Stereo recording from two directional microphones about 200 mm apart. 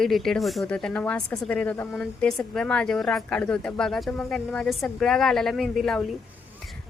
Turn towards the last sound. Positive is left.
turn(degrees=0)  # may be behind; listen again after turning